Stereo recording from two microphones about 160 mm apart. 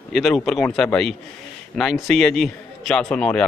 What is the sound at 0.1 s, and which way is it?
A man's voice, centre (ahead or behind).